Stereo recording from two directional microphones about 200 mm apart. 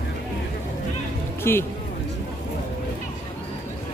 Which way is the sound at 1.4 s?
10° left (ahead or behind).